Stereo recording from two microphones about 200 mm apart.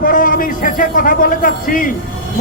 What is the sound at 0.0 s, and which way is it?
Speech, 45° left (ahead or behind).